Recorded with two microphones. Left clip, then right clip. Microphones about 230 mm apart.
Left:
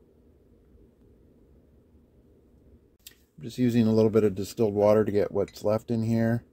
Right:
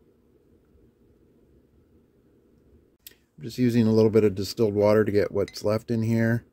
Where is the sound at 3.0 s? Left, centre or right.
Centre.